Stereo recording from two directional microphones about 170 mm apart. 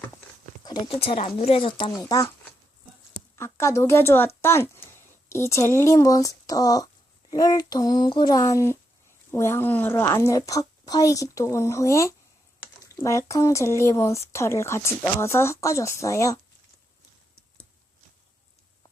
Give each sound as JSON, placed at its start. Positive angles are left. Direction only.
{"t": 0.6, "sound": "a sound", "side_deg": 25}
{"t": 0.9, "sound": "speech", "side_deg": 35}
{"t": 1.9, "sound": "speech", "side_deg": 20}